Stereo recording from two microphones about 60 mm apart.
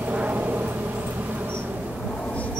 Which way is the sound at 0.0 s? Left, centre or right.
Right.